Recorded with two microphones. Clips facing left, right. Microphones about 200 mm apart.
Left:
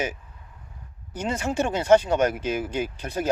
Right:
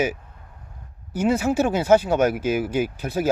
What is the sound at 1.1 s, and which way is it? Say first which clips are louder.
Speech: right 6 dB; 5° right (ahead or behind).